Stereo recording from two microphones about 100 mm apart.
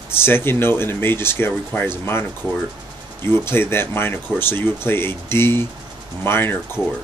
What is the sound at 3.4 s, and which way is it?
Speech, 25° left (ahead or behind).